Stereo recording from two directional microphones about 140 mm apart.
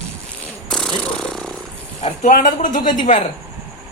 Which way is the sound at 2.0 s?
60° left (ahead or behind).